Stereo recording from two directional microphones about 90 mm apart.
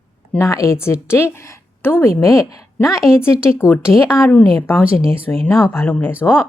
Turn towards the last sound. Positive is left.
turn(degrees=20)  # may be behind; listen again after turning